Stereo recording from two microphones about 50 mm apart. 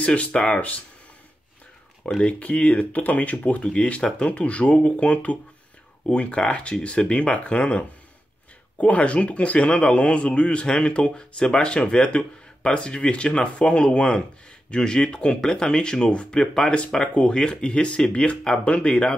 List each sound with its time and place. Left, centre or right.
0.0 s a man's voice: left
2.2 s a man's voice: left